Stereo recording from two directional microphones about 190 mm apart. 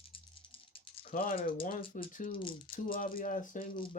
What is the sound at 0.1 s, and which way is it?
Rattle, 30° left (ahead or behind).